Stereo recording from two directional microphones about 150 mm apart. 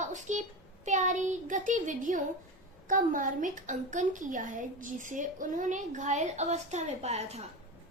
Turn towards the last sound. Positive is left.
turn(degrees=-45)  # may be behind; listen again after turning